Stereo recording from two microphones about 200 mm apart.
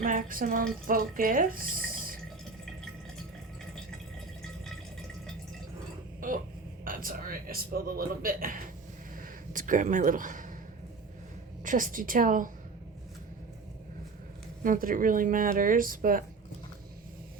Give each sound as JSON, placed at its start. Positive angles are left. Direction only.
{"t": 0.0, "sound": "speech", "side_deg": -45}
{"t": 6.1, "sound": "a sound", "side_deg": -40}
{"t": 6.8, "sound": "speech", "side_deg": -45}
{"t": 11.6, "sound": "speech", "side_deg": -40}
{"t": 14.6, "sound": "speech", "side_deg": -45}